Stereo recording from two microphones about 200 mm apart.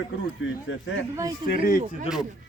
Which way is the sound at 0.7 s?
70° left (ahead or behind).